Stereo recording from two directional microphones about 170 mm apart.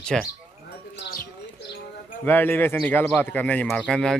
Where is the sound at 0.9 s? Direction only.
90° left.